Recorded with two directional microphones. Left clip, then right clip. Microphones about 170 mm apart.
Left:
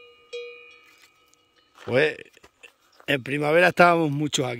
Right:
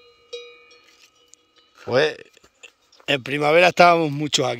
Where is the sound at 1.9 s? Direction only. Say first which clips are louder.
Right 2 dB; 15° left (ahead or behind).